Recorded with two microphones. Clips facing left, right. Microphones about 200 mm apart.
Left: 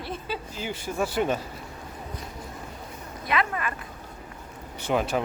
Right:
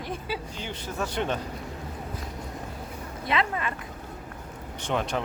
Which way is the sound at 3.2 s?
25° right (ahead or behind).